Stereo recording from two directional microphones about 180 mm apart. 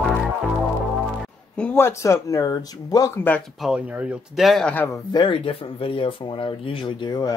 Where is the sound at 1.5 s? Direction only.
10° left (ahead or behind).